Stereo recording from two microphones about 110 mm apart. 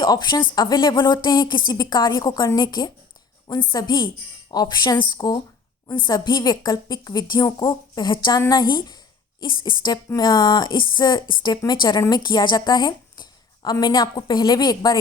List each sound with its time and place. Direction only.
0.0 s a woman's voice: 40° left (ahead or behind)